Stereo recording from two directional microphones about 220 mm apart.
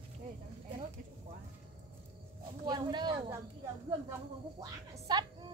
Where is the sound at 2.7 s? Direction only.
20° right (ahead or behind).